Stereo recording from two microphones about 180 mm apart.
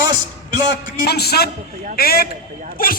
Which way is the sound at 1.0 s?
65° left (ahead or behind).